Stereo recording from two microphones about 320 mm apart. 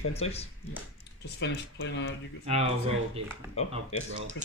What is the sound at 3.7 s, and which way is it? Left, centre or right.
Speech, centre.